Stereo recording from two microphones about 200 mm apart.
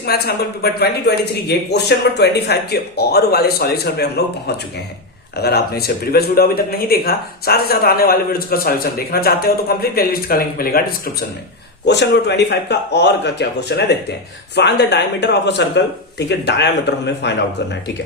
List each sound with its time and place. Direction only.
0.0 s speech: 50° left (ahead or behind)
11.9 s speech: 60° left (ahead or behind)